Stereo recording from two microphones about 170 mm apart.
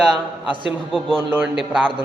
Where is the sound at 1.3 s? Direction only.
5° right (ahead or behind).